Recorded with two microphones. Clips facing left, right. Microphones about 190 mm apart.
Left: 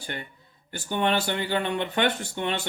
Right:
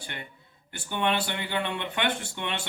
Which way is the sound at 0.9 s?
40° left (ahead or behind).